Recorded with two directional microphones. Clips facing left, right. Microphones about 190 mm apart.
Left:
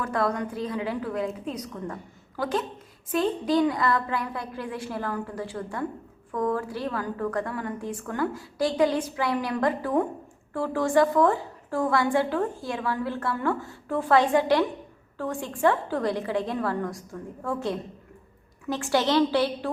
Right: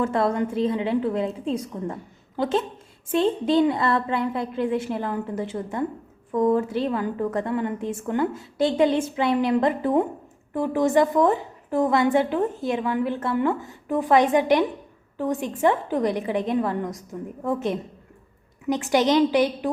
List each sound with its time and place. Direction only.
0.0 s a woman's voice: 25° right (ahead or behind)